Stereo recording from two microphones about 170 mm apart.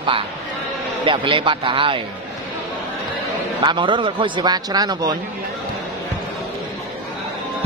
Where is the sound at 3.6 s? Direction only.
30° right (ahead or behind).